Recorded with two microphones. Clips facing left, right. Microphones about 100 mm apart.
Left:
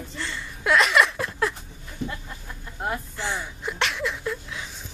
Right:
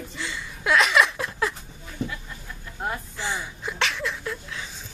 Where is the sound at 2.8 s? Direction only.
Centre (ahead or behind).